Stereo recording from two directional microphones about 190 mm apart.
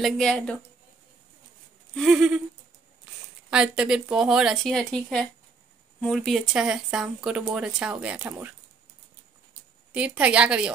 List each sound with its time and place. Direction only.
0.0 s speech: 5° left (ahead or behind)
2.0 s speech: centre (ahead or behind)
3.4 s speech: 5° right (ahead or behind)
5.9 s speech: centre (ahead or behind)
9.9 s a woman's voice: 5° right (ahead or behind)